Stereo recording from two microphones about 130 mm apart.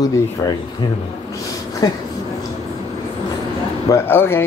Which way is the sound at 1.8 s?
30° left (ahead or behind).